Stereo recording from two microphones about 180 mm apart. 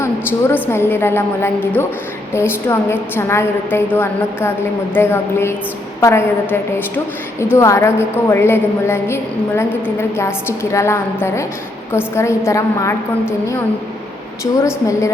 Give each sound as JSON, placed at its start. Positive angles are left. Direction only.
{"t": 0.5, "sound": "a woman's voice", "side_deg": 15}
{"t": 14.6, "sound": "a woman's voice", "side_deg": 15}